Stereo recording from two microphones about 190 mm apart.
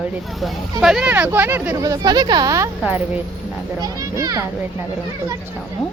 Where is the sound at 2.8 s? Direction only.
10° right (ahead or behind).